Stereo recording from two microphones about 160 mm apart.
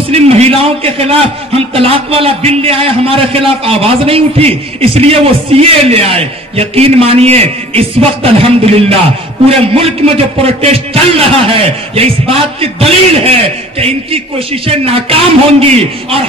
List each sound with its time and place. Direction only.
0.1 s a man's voice: 40° right (ahead or behind)